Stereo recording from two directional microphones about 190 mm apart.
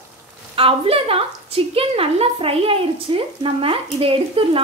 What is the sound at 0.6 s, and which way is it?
A woman's voice, 30° right (ahead or behind).